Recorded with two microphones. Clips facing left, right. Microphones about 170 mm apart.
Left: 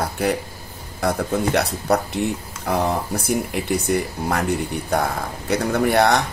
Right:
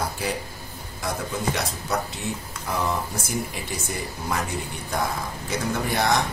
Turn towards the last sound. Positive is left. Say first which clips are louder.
# left 6 dB
turn(degrees=65)  # may be behind; listen again after turning